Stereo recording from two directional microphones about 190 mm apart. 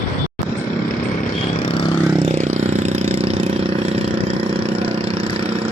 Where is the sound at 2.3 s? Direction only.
40° right (ahead or behind).